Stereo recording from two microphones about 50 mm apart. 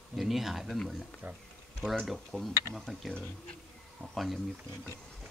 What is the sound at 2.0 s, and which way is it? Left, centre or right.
Speech, centre.